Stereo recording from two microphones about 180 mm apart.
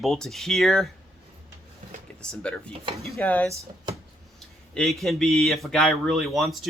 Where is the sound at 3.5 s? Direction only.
20° right (ahead or behind).